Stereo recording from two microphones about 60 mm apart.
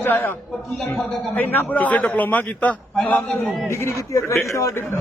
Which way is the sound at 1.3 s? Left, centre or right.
Left.